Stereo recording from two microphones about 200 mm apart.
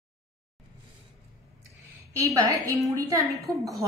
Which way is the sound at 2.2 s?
15° right (ahead or behind).